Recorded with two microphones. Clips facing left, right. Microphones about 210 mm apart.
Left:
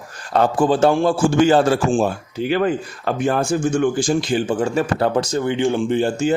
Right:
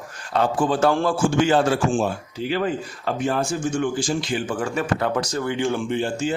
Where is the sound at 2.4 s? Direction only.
60° left (ahead or behind); by 5.9 s 20° left (ahead or behind).